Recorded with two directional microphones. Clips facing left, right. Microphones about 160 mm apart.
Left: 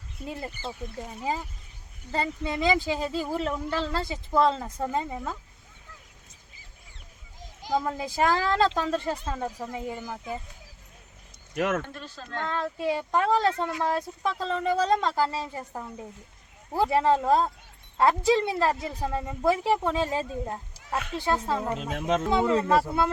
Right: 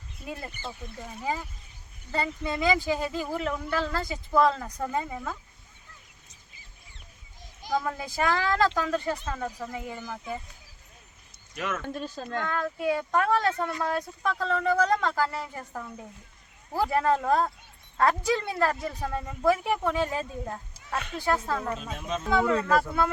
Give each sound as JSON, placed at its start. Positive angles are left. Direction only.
{"t": 0.4, "sound": "speech", "side_deg": 30}
{"t": 2.1, "sound": "speech", "side_deg": 25}
{"t": 7.7, "sound": "speech", "side_deg": 25}
{"t": 11.5, "sound": "speech", "side_deg": 50}
{"t": 12.0, "sound": "speech", "side_deg": -45}
{"t": 12.5, "sound": "speech", "side_deg": 25}
{"t": 21.8, "sound": "speech", "side_deg": 80}
{"t": 22.3, "sound": "speech", "side_deg": 25}